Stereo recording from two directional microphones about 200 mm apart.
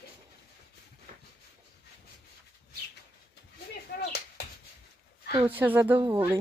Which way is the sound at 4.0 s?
55° left (ahead or behind).